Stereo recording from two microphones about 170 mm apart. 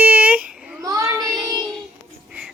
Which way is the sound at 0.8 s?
20° right (ahead or behind).